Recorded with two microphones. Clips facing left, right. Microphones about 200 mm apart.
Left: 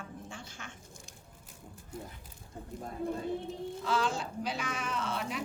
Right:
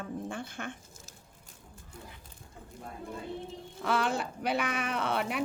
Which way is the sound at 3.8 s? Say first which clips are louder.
Right 3 dB; 60° right (ahead or behind).